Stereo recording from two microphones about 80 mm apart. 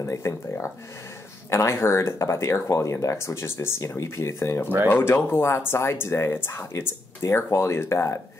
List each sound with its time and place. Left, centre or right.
0.0 s speech: left